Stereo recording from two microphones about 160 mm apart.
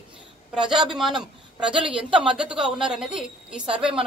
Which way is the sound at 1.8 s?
30° right (ahead or behind).